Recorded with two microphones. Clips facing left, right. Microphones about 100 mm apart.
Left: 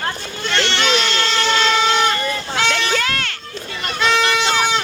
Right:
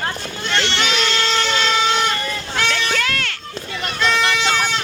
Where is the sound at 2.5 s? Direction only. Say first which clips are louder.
Left 1 dB; 5° left (ahead or behind).